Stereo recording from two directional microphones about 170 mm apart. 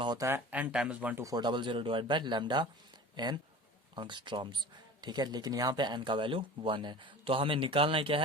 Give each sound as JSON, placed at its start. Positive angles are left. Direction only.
{"t": 0.0, "sound": "speech", "side_deg": -20}